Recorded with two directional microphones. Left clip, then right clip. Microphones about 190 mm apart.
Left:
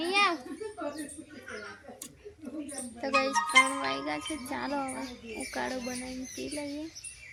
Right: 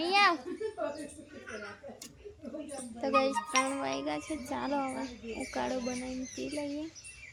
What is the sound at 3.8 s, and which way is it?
Speech, 10° right (ahead or behind).